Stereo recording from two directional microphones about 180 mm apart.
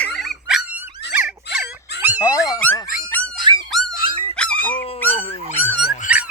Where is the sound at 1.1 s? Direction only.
10° right (ahead or behind).